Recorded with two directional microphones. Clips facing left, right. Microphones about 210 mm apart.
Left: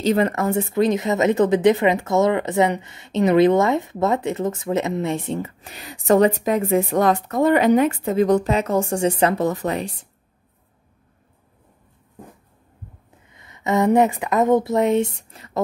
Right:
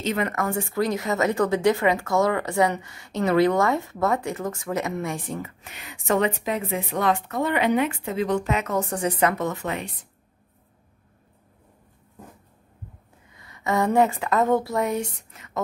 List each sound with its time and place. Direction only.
0.0 s a woman's voice: 35° left (ahead or behind)
13.3 s a woman's voice: 20° left (ahead or behind)